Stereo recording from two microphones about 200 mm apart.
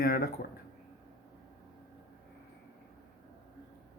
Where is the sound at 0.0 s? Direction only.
50° left (ahead or behind).